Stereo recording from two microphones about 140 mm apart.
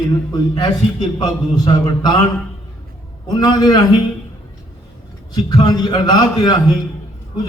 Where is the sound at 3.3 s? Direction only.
30° left (ahead or behind).